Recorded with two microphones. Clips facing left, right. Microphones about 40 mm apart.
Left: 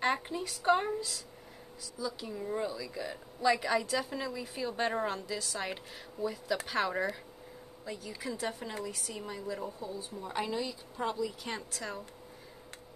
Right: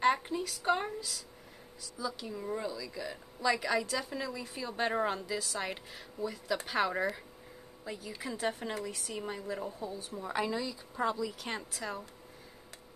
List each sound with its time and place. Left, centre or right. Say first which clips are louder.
0.0 s a woman's voice: right 3 dB; centre
8.4 s speech: right 5 dB; right
9.8 s speech: even; right
10.3 s a woman's voice: right 1 dB; centre